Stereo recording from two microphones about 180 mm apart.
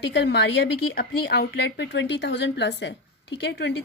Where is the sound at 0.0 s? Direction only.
75° left (ahead or behind).